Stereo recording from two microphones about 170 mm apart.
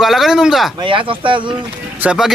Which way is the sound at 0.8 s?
30° right (ahead or behind).